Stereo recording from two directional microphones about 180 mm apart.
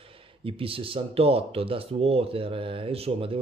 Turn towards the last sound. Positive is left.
turn(degrees=-30)  # may be behind; listen again after turning